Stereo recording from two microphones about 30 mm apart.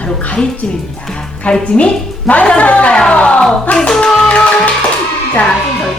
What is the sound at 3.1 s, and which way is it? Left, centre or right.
Music, left.